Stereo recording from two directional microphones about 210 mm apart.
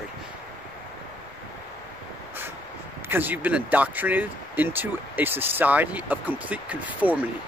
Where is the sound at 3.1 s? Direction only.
10° right (ahead or behind).